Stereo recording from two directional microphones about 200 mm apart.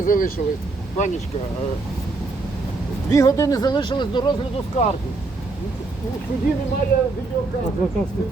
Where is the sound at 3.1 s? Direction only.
15° left (ahead or behind).